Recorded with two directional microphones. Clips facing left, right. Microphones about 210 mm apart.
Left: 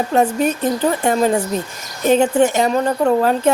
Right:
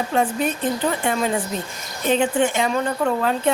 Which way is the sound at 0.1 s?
40° left (ahead or behind).